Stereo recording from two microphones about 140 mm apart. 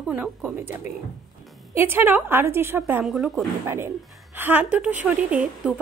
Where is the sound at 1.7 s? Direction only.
15° right (ahead or behind).